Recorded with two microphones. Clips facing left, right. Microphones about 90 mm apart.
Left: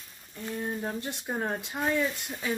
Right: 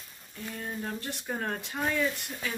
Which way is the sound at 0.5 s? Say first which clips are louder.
Left 4 dB; 20° left (ahead or behind).